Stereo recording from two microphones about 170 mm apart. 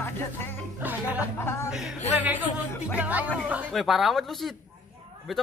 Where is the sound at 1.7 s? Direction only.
5° right (ahead or behind).